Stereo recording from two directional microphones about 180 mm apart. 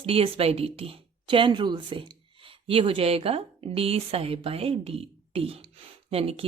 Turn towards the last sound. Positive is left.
turn(degrees=-30)  # may be behind; listen again after turning